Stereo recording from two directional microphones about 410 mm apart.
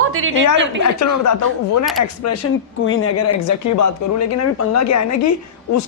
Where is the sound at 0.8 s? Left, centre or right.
Left.